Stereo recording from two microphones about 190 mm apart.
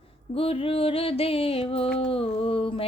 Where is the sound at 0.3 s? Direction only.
30° left (ahead or behind).